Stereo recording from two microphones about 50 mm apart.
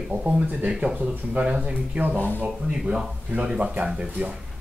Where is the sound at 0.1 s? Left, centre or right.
Right.